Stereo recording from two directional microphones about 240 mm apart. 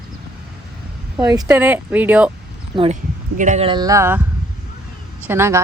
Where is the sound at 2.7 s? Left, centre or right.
Right.